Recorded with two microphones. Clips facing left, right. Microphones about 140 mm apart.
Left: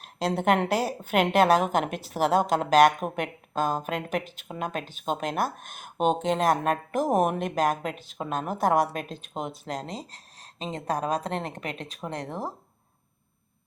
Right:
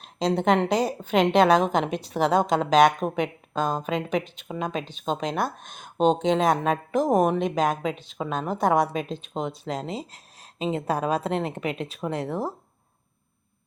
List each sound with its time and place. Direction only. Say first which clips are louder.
0.0 s a woman's voice: right 3 dB; 5° left (ahead or behind)
11.0 s a woman's voice: right 3 dB; 40° left (ahead or behind)
11.3 s a woman's voice: right 5 dB; 5° right (ahead or behind)